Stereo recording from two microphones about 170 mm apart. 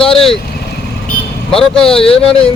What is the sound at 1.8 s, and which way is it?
Speech, 35° left (ahead or behind).